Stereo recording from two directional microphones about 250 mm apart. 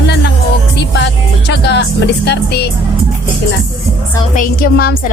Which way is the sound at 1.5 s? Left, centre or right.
Left.